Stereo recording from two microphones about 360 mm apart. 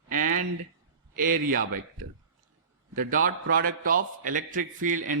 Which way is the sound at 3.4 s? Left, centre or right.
Right.